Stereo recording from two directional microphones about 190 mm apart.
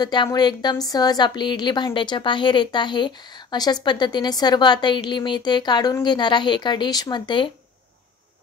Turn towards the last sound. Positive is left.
turn(degrees=25)  # may be behind; listen again after turning